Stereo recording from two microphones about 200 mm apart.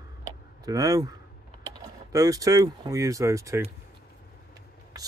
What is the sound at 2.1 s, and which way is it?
Speech, 15° right (ahead or behind).